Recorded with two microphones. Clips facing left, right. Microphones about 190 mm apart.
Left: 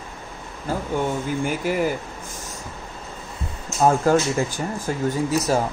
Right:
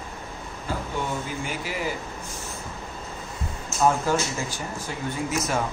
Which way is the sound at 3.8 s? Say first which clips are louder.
Left 5 dB; 45° left (ahead or behind).